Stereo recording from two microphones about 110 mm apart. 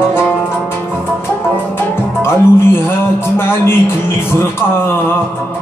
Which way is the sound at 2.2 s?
20° left (ahead or behind).